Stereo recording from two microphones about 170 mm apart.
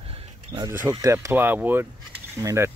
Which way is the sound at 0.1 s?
30° right (ahead or behind).